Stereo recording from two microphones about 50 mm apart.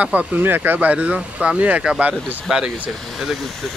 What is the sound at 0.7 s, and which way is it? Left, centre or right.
Speech, right.